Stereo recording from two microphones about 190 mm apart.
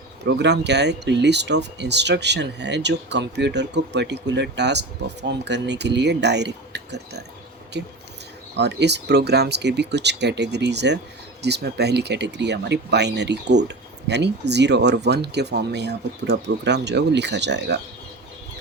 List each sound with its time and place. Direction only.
0.3 s speech: 60° right (ahead or behind)
8.5 s speech: 65° right (ahead or behind)